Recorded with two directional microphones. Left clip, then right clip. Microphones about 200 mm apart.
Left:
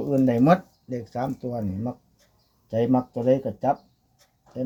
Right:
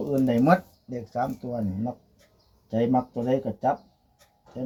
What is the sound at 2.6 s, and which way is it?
Speech, 45° left (ahead or behind).